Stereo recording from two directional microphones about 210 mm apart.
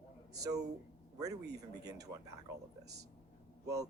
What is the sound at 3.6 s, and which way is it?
Speech, 15° right (ahead or behind).